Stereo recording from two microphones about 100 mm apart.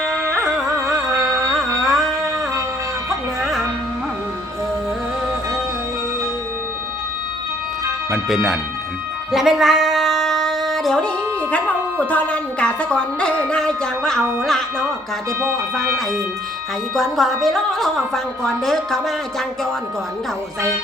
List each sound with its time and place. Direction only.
0.9 s music: 30° right (ahead or behind)
1.5 s carnatic music: centre (ahead or behind)
8.1 s a woman's voice: 5° right (ahead or behind)
9.3 s singing: 5° right (ahead or behind)
11.5 s a woman's voice: 15° left (ahead or behind)
16.9 s a woman's voice: centre (ahead or behind)